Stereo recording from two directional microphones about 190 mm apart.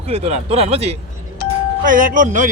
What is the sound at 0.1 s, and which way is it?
Speech, 35° right (ahead or behind).